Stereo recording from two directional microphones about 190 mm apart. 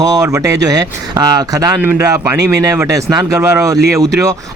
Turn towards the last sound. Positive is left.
turn(degrees=-15)  # may be behind; listen again after turning